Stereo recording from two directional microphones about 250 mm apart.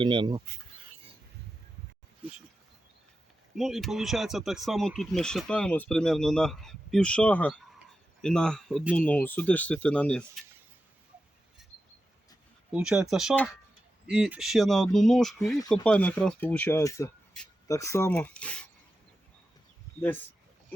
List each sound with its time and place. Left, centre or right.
0.0 s speech: centre
3.5 s speech: centre
12.7 s speech: centre